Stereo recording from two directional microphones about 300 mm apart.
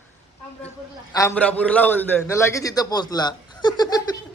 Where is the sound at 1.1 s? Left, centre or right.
Centre.